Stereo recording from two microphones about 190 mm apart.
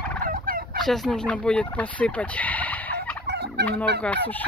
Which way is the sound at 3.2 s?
60° right (ahead or behind).